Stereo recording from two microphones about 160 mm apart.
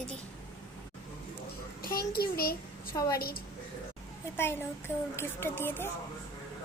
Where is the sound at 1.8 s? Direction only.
70° left (ahead or behind).